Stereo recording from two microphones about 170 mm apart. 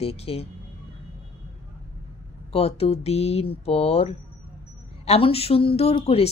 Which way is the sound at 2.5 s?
35° left (ahead or behind).